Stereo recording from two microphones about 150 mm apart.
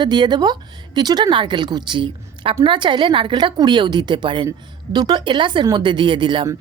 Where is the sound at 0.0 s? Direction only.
30° right (ahead or behind).